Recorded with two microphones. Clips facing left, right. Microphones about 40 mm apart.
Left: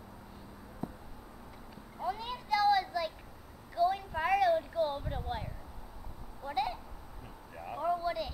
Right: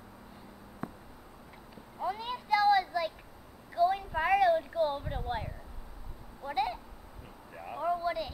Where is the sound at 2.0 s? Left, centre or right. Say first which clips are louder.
Right 2 dB; centre.